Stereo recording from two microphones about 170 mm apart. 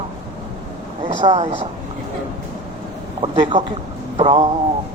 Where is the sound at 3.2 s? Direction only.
30° right (ahead or behind).